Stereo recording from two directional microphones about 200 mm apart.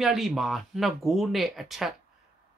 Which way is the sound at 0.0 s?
Centre (ahead or behind).